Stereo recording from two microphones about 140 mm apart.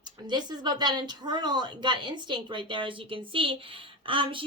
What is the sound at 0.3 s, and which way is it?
Speech, 30° right (ahead or behind).